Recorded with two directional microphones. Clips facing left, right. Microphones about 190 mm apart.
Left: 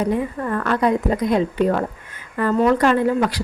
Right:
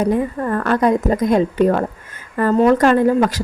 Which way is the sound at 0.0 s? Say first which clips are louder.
Right 3 dB; 40° right (ahead or behind).